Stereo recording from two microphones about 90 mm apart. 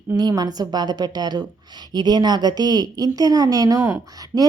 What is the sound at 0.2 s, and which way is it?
Speech, 50° right (ahead or behind).